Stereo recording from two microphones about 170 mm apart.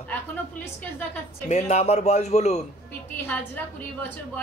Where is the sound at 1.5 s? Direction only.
45° left (ahead or behind).